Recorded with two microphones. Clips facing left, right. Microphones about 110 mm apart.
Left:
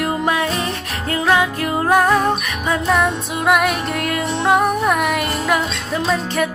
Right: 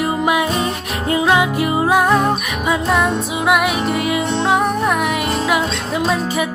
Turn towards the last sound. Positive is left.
turn(degrees=-10)  # may be behind; listen again after turning